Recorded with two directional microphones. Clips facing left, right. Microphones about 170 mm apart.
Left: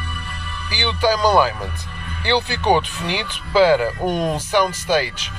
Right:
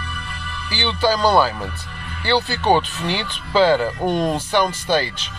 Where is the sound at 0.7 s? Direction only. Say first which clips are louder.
Even; 15° left (ahead or behind).